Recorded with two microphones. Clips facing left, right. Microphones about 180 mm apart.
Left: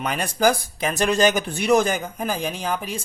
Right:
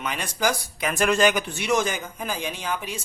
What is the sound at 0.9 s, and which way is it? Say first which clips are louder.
Speech: left 1 dB; 35° left (ahead or behind).